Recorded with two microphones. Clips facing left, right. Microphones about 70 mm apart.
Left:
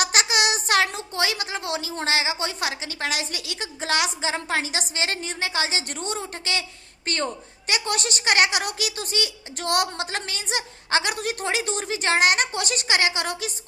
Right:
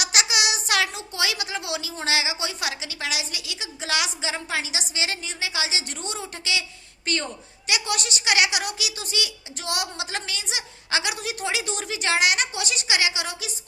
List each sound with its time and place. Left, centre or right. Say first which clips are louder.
0.0 s a woman's voice: left 3 dB; left
9.6 s a woman's voice: left 6 dB; left